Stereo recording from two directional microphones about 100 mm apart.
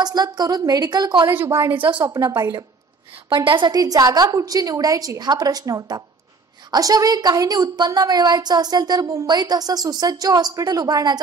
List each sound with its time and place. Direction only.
0.0 s a woman's voice: 45° right (ahead or behind)
1.3 s a woman's voice: 25° right (ahead or behind)
1.8 s speech: 55° right (ahead or behind)
2.0 s a woman's voice: 35° right (ahead or behind)
3.3 s a woman's voice: 50° right (ahead or behind)